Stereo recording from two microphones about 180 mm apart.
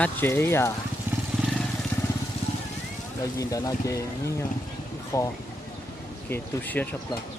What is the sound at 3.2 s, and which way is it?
Speech, 20° left (ahead or behind).